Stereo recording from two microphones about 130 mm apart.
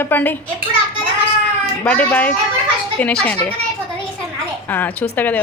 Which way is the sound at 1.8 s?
10° left (ahead or behind).